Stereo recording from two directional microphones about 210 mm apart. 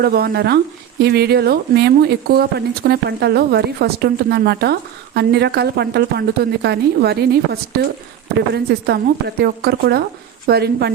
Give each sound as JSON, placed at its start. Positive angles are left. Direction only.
{"t": 0.0, "sound": "speech", "side_deg": -50}